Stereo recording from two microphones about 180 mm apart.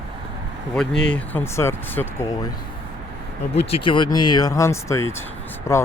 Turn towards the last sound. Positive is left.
turn(degrees=15)  # may be behind; listen again after turning